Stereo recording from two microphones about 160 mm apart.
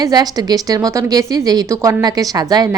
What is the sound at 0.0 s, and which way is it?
A woman's voice, 25° right (ahead or behind).